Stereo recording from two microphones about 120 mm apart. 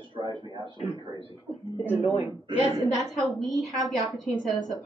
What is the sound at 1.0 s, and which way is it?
Speech, 45° right (ahead or behind).